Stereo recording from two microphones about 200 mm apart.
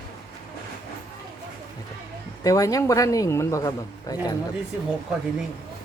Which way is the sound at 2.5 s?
15° left (ahead or behind).